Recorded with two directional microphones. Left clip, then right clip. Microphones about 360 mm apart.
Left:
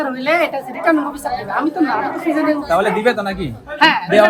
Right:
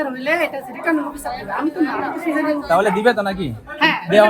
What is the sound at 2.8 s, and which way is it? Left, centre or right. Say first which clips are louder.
Speech: even; centre.